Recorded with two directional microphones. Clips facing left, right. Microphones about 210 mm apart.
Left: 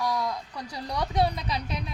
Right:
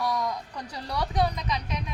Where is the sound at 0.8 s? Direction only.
20° left (ahead or behind).